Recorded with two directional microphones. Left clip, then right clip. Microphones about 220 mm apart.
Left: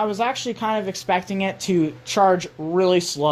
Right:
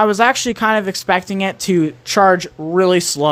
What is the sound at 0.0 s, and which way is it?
Speech, 30° right (ahead or behind).